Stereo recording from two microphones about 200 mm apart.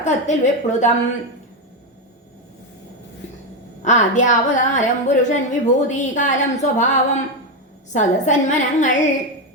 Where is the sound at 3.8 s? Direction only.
35° left (ahead or behind).